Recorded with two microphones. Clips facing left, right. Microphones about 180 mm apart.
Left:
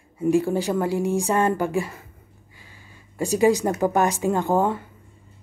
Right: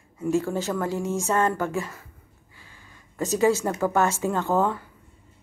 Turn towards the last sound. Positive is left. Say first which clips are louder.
# left 2 dB
turn(degrees=15)  # may be behind; listen again after turning